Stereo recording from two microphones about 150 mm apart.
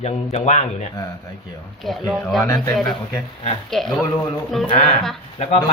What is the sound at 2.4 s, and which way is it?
Speech, 20° left (ahead or behind).